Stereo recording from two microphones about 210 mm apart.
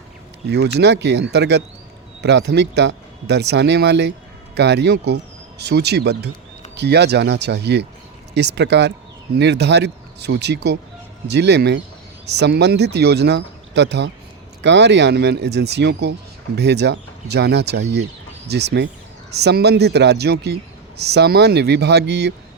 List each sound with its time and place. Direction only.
0.8 s a man's voice: 55° right (ahead or behind)